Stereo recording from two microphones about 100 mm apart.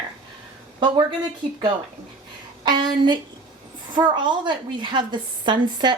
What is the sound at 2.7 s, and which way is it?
A woman's voice, 50° right (ahead or behind).